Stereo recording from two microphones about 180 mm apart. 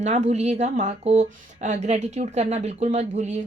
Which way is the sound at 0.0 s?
40° right (ahead or behind).